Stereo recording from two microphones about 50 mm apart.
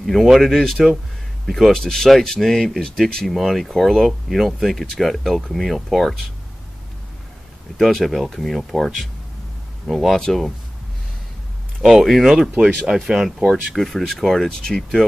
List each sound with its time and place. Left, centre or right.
0.0 s speech: centre
7.7 s speech: centre
11.8 s speech: centre
12.5 s speech: right
12.9 s speech: centre
13.7 s speech: centre